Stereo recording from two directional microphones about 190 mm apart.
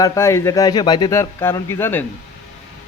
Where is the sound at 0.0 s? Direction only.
15° left (ahead or behind).